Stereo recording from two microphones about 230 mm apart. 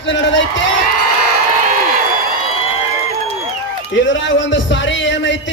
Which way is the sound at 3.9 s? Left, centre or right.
Left.